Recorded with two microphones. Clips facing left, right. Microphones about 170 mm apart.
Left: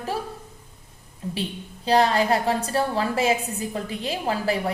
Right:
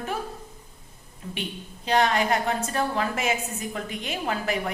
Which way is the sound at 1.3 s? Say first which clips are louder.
Left 4 dB; 30° left (ahead or behind).